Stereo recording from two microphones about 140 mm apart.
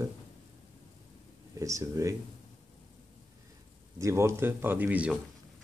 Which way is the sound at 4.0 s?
20° right (ahead or behind).